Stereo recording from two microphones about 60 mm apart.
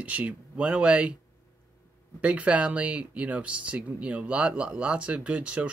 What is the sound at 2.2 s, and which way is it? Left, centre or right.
Speech, right.